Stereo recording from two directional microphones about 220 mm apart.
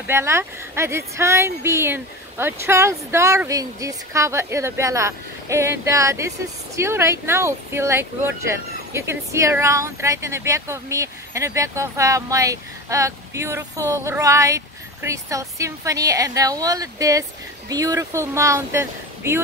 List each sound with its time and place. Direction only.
0.0 s speech: 10° right (ahead or behind)